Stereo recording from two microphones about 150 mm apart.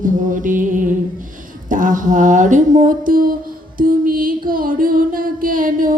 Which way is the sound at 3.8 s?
70° right (ahead or behind).